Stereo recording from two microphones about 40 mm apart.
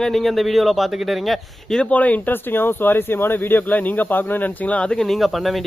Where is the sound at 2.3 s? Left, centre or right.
Left.